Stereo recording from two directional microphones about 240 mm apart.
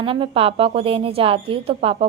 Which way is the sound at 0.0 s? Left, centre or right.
Right.